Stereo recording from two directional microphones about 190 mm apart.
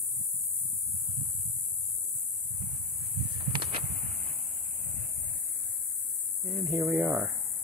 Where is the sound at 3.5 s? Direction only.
25° right (ahead or behind).